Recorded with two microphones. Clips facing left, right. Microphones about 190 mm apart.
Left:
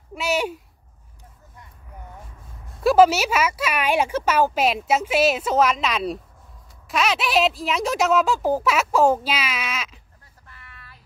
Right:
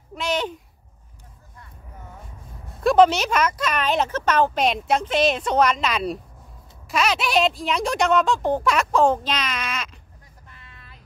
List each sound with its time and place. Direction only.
0.1 s speech: 10° left (ahead or behind)
2.7 s speech: 5° left (ahead or behind)
10.5 s a sound: 20° right (ahead or behind)